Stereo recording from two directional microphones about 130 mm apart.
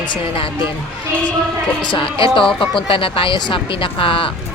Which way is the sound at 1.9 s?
40° left (ahead or behind).